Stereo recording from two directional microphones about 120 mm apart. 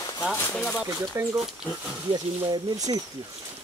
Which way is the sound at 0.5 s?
10° left (ahead or behind).